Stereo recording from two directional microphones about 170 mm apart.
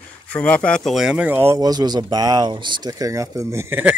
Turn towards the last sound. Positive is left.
turn(degrees=-10)  # may be behind; listen again after turning